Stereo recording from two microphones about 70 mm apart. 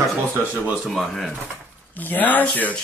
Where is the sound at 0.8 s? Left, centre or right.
Centre.